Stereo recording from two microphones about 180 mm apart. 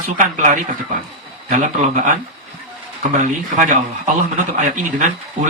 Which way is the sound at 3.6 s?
45° right (ahead or behind).